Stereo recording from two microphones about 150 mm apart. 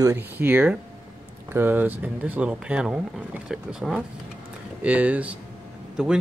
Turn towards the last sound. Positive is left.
turn(degrees=-5)  # may be behind; listen again after turning